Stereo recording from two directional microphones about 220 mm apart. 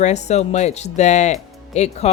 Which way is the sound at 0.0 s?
30° left (ahead or behind).